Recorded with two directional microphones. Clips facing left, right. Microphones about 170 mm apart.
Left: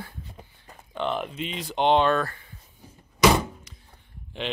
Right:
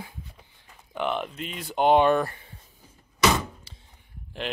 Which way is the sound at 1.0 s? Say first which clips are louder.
Even; centre (ahead or behind).